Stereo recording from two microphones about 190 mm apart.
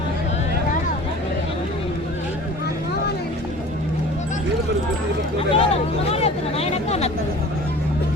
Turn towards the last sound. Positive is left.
turn(degrees=35)  # may be behind; listen again after turning